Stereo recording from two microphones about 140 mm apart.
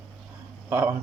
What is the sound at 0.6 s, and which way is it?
Speech, 15° right (ahead or behind).